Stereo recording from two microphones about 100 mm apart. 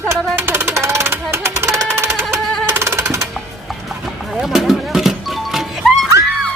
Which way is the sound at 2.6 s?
25° right (ahead or behind).